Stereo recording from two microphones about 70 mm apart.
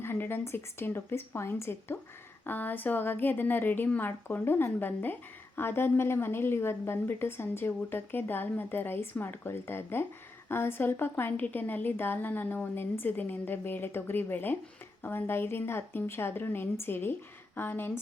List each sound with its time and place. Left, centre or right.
0.0 s a woman's voice: left
2.5 s a woman's voice: left